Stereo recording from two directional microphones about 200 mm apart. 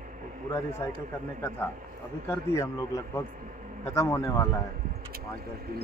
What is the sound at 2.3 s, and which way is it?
Speech, 15° left (ahead or behind).